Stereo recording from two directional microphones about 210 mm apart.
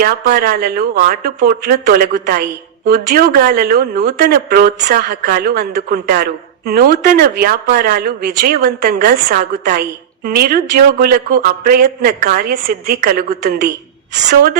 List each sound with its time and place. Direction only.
0.0 s speech: 45° right (ahead or behind)